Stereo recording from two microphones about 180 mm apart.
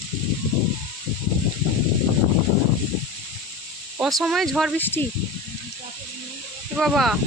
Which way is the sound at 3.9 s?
Centre (ahead or behind).